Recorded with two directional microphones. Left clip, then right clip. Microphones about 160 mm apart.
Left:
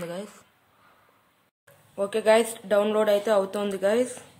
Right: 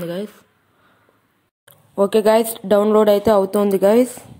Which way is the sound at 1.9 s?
35° right (ahead or behind).